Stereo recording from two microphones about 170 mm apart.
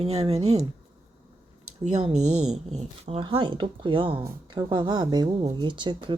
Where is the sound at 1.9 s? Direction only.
40° right (ahead or behind).